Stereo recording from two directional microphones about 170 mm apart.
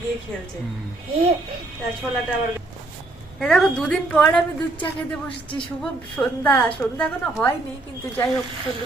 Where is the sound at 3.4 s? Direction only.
5° left (ahead or behind).